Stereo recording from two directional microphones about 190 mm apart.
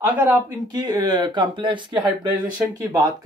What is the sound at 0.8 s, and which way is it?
Speech, 20° right (ahead or behind).